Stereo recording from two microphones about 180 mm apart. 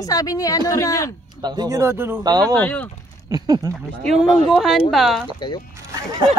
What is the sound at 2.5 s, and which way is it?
Speech, 10° left (ahead or behind).